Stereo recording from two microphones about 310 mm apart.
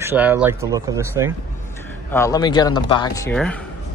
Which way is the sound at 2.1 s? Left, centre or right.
Centre.